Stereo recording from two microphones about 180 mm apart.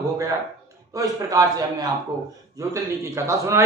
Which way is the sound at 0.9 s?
20° right (ahead or behind).